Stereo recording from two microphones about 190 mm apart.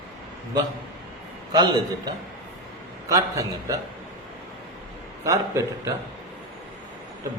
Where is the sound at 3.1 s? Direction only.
20° right (ahead or behind).